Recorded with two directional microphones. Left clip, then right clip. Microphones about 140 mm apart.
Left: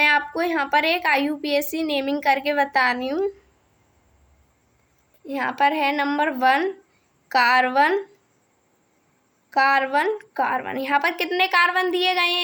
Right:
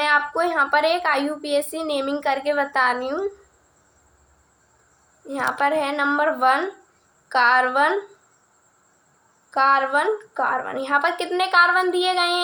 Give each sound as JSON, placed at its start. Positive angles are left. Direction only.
{"t": 0.0, "sound": "a woman's voice", "side_deg": 40}
{"t": 5.2, "sound": "a woman's voice", "side_deg": 40}
{"t": 9.5, "sound": "a woman's voice", "side_deg": 40}